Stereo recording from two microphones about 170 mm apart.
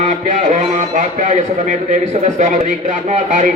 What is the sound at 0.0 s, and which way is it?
A man's voice, 50° right (ahead or behind).